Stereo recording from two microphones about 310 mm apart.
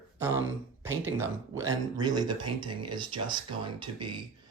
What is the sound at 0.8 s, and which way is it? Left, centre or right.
Speech, centre.